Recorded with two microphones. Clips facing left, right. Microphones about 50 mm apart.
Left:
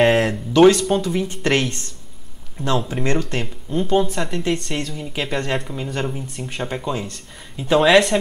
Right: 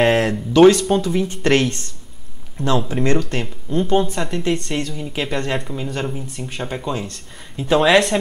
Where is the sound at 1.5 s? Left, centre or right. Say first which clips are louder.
Right 3 dB; left.